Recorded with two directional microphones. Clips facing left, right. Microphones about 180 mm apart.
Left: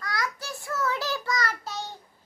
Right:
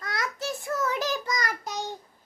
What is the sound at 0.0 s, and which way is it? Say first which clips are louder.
Child singing: right 1 dB; 25° right (ahead or behind).